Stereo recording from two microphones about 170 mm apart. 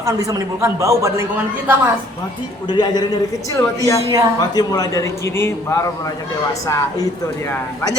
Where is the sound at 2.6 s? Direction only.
25° left (ahead or behind).